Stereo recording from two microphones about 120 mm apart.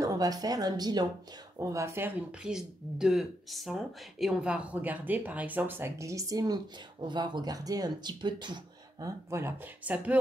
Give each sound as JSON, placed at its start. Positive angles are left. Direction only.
{"t": 0.0, "sound": "speech", "side_deg": -30}
{"t": 2.4, "sound": "speech", "side_deg": -5}
{"t": 9.0, "sound": "speech", "side_deg": -20}